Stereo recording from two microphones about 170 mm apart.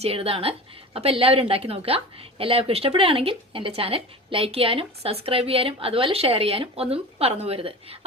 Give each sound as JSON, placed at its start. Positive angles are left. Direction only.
{"t": 0.0, "sound": "speech", "side_deg": -35}